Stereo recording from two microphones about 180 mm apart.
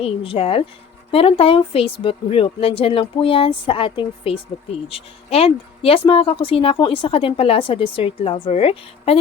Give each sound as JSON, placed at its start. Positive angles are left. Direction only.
{"t": 0.0, "sound": "speech", "side_deg": 30}